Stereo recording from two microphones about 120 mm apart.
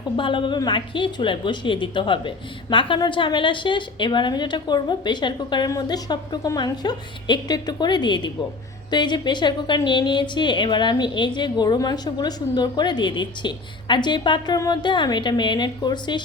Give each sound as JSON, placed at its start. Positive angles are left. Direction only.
{"t": 0.2, "sound": "a woman's voice", "side_deg": 40}